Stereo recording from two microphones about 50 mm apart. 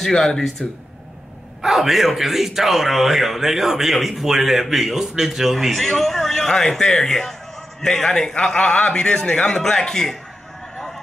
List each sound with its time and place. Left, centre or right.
0.0 s a man's voice: centre
1.6 s a man's voice: centre